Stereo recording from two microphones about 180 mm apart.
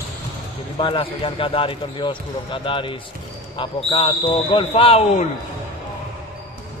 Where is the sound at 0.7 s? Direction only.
30° left (ahead or behind).